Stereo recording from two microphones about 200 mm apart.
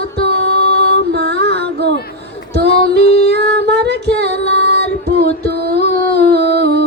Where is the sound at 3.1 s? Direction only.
55° right (ahead or behind).